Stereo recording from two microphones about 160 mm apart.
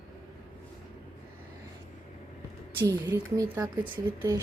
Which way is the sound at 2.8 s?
15° right (ahead or behind).